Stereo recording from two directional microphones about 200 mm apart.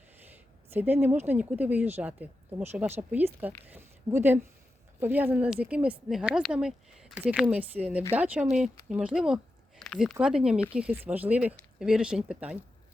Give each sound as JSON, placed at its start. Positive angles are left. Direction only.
{"t": 0.7, "sound": "speech", "side_deg": -10}